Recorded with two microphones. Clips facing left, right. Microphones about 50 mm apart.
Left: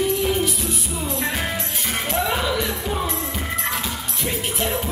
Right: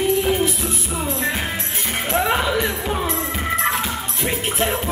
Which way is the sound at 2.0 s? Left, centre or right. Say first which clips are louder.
Right 4 dB; right.